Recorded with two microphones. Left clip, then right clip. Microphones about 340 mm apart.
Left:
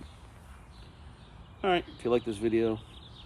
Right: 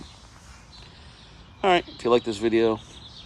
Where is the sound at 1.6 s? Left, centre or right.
Centre.